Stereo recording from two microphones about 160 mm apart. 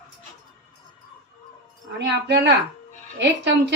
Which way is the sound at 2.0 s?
90° right.